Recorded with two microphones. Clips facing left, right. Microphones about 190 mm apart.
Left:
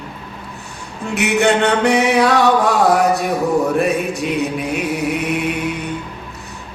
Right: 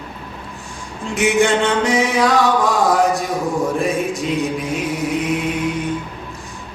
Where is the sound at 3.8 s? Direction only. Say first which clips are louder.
Left 2 dB; 65° left (ahead or behind).